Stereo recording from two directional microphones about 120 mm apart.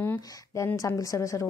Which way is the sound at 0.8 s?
25° left (ahead or behind).